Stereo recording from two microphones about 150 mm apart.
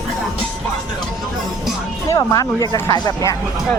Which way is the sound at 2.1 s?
25° left (ahead or behind).